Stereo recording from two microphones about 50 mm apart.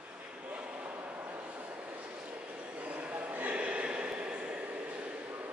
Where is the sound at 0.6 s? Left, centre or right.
Right.